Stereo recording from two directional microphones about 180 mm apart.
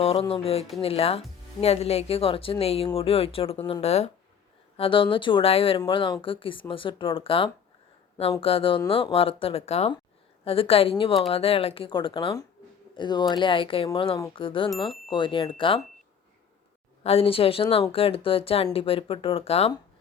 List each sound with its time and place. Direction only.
0.0 s speech: 35° left (ahead or behind)
17.0 s speech: 35° left (ahead or behind)